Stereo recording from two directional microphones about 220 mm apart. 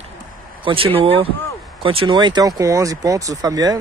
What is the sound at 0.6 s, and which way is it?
A man's voice, 25° right (ahead or behind).